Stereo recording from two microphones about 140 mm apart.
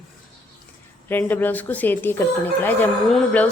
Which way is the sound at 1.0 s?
15° left (ahead or behind).